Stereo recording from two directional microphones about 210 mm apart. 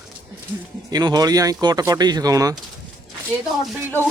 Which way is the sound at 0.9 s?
20° right (ahead or behind).